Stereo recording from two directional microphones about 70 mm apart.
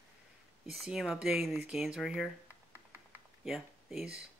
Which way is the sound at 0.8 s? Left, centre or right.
Centre.